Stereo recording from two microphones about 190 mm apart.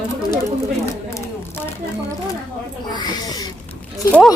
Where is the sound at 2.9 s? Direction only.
20° left (ahead or behind).